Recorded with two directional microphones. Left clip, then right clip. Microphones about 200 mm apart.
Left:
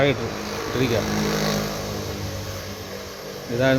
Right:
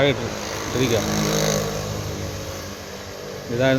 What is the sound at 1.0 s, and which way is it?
Speech, 50° right (ahead or behind).